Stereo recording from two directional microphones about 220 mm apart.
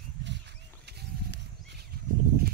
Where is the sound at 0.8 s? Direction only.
50° right (ahead or behind).